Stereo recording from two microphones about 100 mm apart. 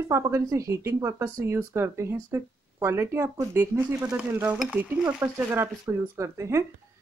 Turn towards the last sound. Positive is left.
turn(degrees=-25)  # may be behind; listen again after turning